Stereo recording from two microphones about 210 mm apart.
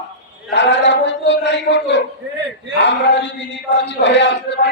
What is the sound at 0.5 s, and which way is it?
A man's voice, 55° left (ahead or behind).